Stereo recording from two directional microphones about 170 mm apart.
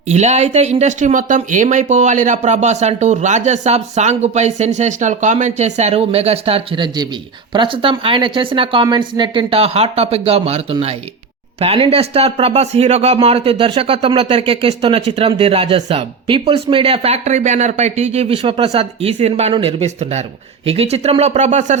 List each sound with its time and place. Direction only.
0.1 s speech: 40° right (ahead or behind)